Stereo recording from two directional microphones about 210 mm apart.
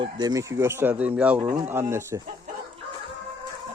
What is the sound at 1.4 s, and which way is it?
Speech, 15° right (ahead or behind).